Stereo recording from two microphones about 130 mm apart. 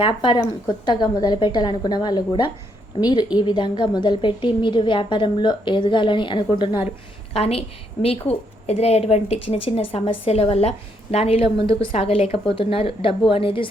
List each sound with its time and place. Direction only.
0.0 s a woman's voice: 40° left (ahead or behind)
7.3 s a woman's voice: 50° left (ahead or behind)